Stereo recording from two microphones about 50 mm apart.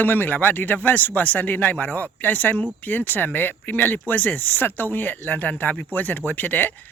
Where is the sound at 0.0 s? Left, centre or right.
Left.